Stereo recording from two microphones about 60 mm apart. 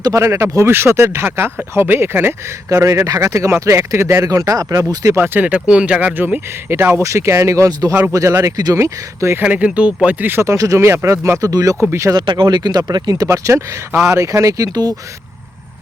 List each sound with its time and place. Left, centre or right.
0.1 s speech: right
2.6 s speech: right
3.7 s speech: right
4.3 s speech: right
5.1 s speech: right
5.5 s speech: right
7.0 s speech: right
8.1 s speech: right
8.4 s speech: right
8.8 s speech: right
9.4 s speech: right
10.4 s speech: right
10.8 s speech: right
11.9 s speech: right